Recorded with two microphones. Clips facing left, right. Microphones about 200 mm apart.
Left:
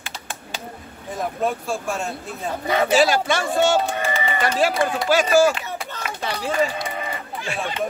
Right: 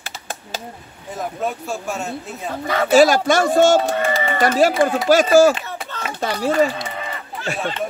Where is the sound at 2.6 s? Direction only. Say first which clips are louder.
Even; 15° left (ahead or behind).